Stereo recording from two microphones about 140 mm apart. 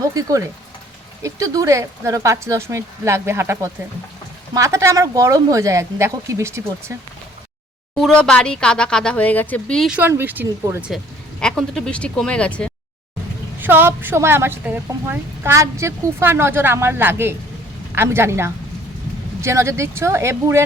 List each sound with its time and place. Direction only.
0.1 s speech: 25° right (ahead or behind)
7.9 s speech: 5° left (ahead or behind)
9.9 s speech: 15° right (ahead or behind)
10.9 s speech: 5° left (ahead or behind)
13.6 s speech: 15° right (ahead or behind)